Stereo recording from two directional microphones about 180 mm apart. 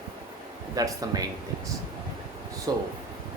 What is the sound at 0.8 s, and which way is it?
Speech, 20° right (ahead or behind).